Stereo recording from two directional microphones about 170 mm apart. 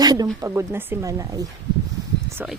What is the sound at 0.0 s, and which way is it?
Speech, 20° right (ahead or behind).